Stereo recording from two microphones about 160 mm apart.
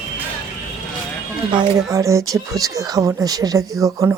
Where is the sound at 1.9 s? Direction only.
20° right (ahead or behind).